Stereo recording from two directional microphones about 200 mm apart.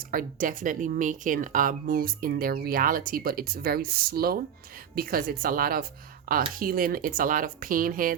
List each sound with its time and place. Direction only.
0.1 s speech: 45° right (ahead or behind)